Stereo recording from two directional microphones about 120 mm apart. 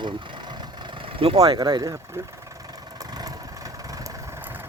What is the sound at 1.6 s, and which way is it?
Speech, 35° right (ahead or behind).